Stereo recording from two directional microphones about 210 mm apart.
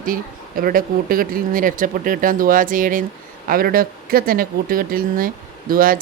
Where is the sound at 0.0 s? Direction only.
40° right (ahead or behind).